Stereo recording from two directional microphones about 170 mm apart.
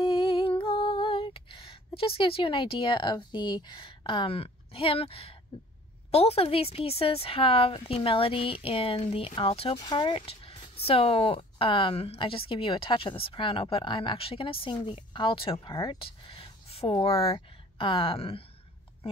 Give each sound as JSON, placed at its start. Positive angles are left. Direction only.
{"t": 0.0, "sound": "music", "side_deg": 30}
{"t": 6.1, "sound": "speech", "side_deg": 35}
{"t": 15.5, "sound": "speech", "side_deg": 20}